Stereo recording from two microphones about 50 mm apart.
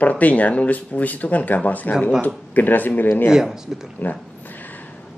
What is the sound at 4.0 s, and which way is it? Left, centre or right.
Speech, left.